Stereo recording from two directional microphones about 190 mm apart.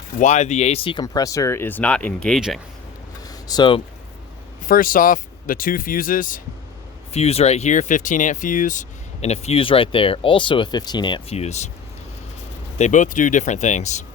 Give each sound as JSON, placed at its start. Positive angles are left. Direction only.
{"t": 0.2, "sound": "speech", "side_deg": 40}
{"t": 3.2, "sound": "a sound", "side_deg": 20}
{"t": 4.7, "sound": "speech", "side_deg": 45}
{"t": 7.1, "sound": "speech", "side_deg": 35}
{"t": 12.8, "sound": "speech", "side_deg": 40}